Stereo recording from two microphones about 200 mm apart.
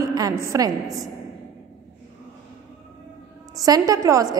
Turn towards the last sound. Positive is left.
turn(degrees=-15)  # may be behind; listen again after turning